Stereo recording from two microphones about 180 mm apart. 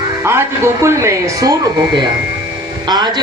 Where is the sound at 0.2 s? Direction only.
15° right (ahead or behind).